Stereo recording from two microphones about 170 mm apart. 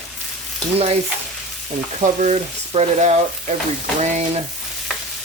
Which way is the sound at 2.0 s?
45° right (ahead or behind).